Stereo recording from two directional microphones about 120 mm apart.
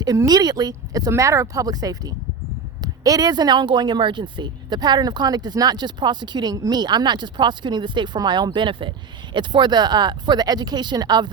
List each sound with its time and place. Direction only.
0.0 s speech: 30° right (ahead or behind)